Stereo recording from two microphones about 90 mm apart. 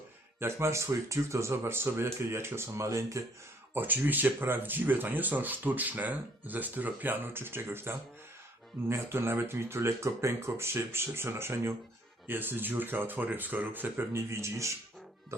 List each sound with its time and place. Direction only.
0.3 s speech: 30° right (ahead or behind)
3.8 s speech: 20° right (ahead or behind)